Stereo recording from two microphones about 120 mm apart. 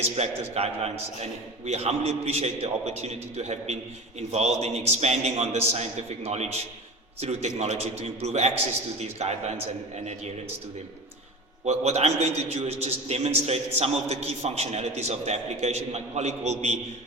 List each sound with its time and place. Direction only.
0.0 s a man's voice: 60° right (ahead or behind)
11.6 s a man's voice: 65° right (ahead or behind)